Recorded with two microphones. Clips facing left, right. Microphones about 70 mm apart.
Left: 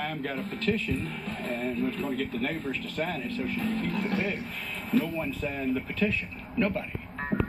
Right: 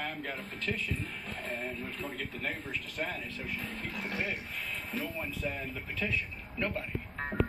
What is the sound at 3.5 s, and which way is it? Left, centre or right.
Speech, left.